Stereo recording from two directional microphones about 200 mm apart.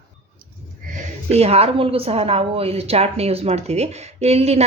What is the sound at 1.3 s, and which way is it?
A woman's voice, 30° right (ahead or behind).